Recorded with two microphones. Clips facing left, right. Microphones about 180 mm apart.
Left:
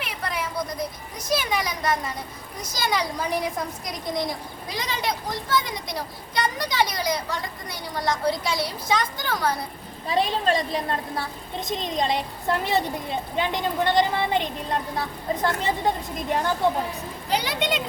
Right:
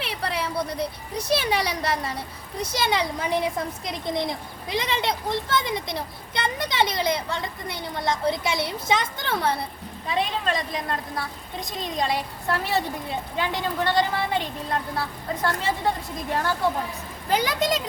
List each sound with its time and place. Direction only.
0.0 s speech: 30° right (ahead or behind)
10.1 s a woman's voice: 35° left (ahead or behind); by 16.6 s 20° left (ahead or behind)
17.2 s speech: 50° right (ahead or behind)